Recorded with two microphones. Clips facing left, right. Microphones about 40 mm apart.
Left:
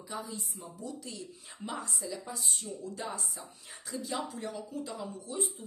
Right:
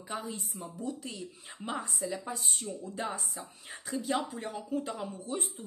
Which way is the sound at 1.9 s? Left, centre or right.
Right.